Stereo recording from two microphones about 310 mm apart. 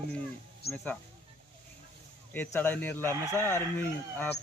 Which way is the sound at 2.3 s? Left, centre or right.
Centre.